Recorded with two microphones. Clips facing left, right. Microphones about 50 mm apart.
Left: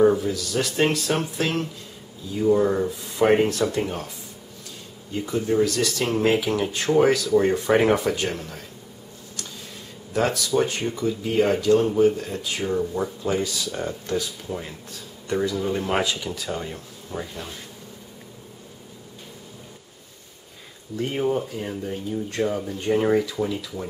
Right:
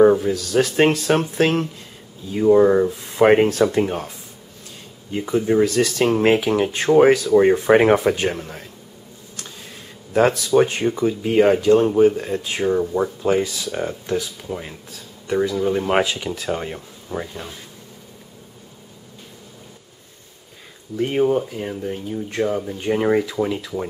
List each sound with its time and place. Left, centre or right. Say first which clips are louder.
0.0 s a sound: right 5 dB; right
0.3 s speech: right 6 dB; right
5.1 s speech: right 4 dB; right
10.1 s speech: right 6 dB; right; by 15.9 s centre
15.9 s speech: right 5 dB; right
17.3 s speech: right 2 dB; centre
20.9 s speech: right 5 dB; centre